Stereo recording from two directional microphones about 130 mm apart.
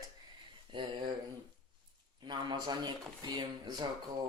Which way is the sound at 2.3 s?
35° right (ahead or behind).